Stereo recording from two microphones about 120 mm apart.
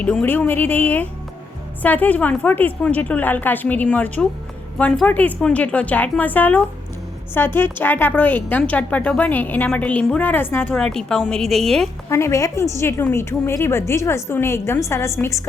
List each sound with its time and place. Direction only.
0.0 s a woman's voice: 10° left (ahead or behind)
10.8 s a woman's voice: 5° left (ahead or behind)
12.0 s a woman's voice: 25° left (ahead or behind)